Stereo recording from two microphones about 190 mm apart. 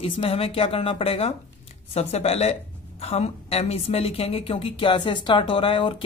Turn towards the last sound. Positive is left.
turn(degrees=25)  # may be behind; listen again after turning